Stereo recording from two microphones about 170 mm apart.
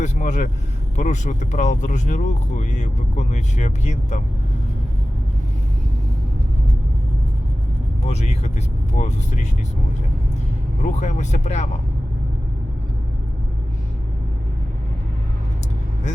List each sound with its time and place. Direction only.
0.0 s speech: 45° left (ahead or behind)
8.0 s speech: 40° left (ahead or behind)
11.0 s speech: 45° left (ahead or behind)